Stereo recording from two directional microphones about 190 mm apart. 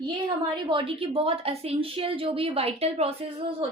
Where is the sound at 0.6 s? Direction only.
25° right (ahead or behind).